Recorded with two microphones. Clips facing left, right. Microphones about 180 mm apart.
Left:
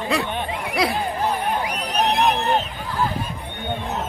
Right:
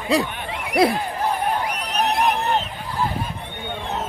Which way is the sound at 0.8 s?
50° right (ahead or behind).